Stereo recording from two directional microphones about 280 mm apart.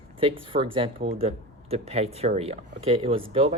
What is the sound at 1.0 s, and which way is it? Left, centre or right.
Speech, right.